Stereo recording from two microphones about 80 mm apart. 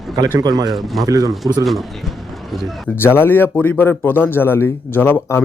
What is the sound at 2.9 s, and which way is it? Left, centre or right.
Speech, left.